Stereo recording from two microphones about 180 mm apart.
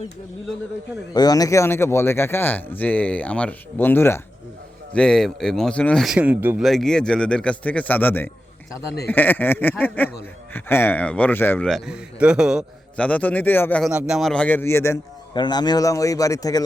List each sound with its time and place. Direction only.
1.1 s speech: 20° left (ahead or behind); by 6.6 s 10° right (ahead or behind)
6.6 s speech: centre (ahead or behind)
13.0 s speech: 5° left (ahead or behind)
13.9 s a man's voice: centre (ahead or behind); by 16.6 s 20° left (ahead or behind)